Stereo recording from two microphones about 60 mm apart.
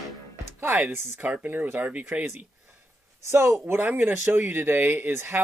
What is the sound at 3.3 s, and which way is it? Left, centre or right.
Speech, right.